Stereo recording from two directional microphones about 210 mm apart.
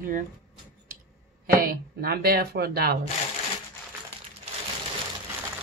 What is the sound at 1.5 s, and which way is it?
Speech, 45° right (ahead or behind).